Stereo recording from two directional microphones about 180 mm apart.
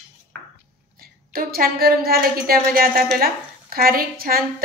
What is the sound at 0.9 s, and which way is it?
A woman's voice, 55° right (ahead or behind).